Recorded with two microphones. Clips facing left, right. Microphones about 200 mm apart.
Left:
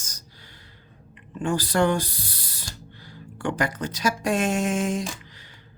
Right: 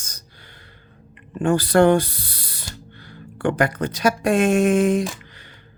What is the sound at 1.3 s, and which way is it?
Speech, 60° right (ahead or behind).